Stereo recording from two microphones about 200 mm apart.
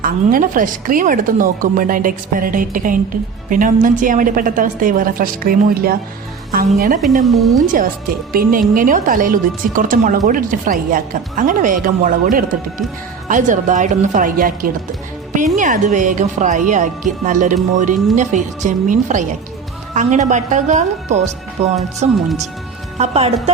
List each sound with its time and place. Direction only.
0.0 s a woman's voice: 45° right (ahead or behind)
7.3 s speech: centre (ahead or behind)
8.3 s a woman's voice: 45° right (ahead or behind)
22.1 s speech: centre (ahead or behind)
23.0 s speech: 30° right (ahead or behind)